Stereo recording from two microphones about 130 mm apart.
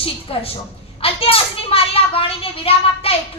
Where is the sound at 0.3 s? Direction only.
50° left (ahead or behind).